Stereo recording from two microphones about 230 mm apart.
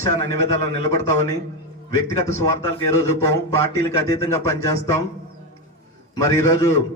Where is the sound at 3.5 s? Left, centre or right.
Centre.